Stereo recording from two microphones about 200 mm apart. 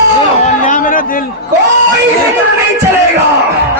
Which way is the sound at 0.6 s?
40° left (ahead or behind).